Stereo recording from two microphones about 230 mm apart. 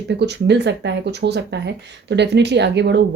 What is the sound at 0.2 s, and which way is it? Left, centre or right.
Speech, right.